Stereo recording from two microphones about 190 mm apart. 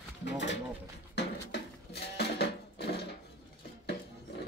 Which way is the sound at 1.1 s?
60° left (ahead or behind).